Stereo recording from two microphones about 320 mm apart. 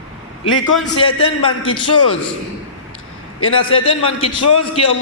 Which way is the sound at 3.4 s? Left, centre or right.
Left.